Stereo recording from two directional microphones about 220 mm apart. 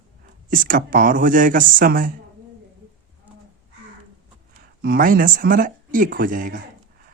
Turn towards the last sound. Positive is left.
turn(degrees=-35)  # may be behind; listen again after turning